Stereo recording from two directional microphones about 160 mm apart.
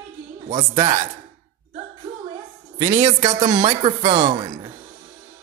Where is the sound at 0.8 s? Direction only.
45° right (ahead or behind).